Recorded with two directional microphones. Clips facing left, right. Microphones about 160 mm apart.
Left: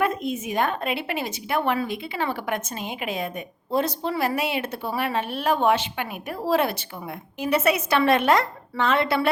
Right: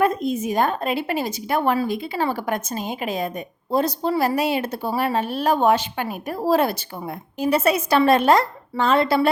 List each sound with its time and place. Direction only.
0.0 s a woman's voice: 40° right (ahead or behind)